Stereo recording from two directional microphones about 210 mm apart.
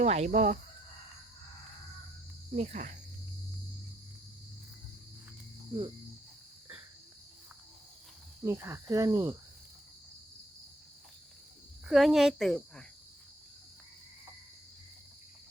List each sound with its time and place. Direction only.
0.0 s speech: 30° right (ahead or behind)
2.5 s speech: 35° right (ahead or behind)
8.4 s cricket: 15° right (ahead or behind)
11.9 s speech: centre (ahead or behind)